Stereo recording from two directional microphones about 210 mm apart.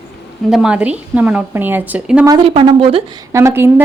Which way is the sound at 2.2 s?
25° right (ahead or behind).